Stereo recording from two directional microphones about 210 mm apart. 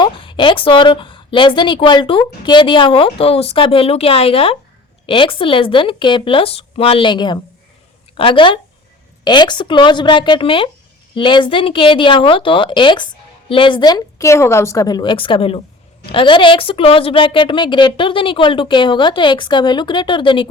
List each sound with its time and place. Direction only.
0.0 s a woman's voice: 20° left (ahead or behind)